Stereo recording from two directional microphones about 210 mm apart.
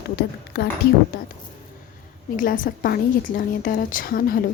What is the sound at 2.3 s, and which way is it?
A woman's voice, 40° left (ahead or behind).